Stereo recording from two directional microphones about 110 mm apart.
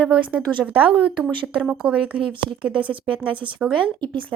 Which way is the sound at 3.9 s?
45° right (ahead or behind).